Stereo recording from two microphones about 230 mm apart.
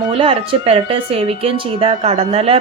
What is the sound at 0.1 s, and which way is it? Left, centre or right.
Speech, right.